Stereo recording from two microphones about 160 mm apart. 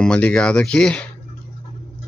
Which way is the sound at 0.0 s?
5° left (ahead or behind).